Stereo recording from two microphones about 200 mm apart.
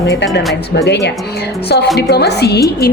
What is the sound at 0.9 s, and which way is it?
A woman's voice, 60° left (ahead or behind).